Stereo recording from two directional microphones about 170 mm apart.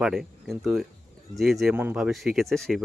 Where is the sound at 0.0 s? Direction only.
Centre (ahead or behind).